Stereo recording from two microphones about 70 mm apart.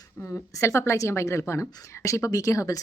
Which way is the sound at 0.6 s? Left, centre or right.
Left.